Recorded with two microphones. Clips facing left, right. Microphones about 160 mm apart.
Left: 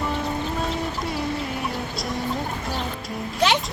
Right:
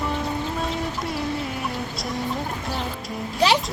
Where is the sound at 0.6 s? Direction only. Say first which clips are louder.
Even; centre (ahead or behind).